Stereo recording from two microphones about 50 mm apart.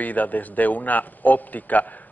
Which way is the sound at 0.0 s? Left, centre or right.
Left.